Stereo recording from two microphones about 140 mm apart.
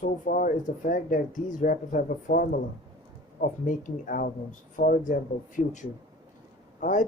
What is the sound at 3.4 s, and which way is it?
Speech, 70° left (ahead or behind).